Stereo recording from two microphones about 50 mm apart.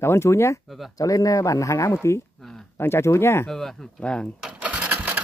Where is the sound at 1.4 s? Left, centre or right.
Left.